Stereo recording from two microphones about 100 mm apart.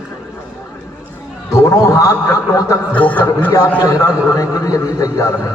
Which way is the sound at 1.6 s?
35° left (ahead or behind).